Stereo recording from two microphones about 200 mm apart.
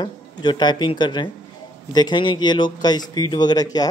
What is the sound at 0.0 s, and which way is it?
Speech, 20° left (ahead or behind).